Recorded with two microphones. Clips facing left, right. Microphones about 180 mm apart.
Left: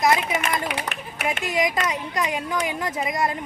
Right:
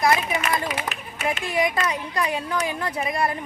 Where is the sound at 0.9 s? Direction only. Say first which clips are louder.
Even; 60° left (ahead or behind).